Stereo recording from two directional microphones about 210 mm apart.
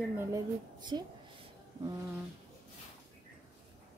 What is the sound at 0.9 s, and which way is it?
Speech, 20° right (ahead or behind).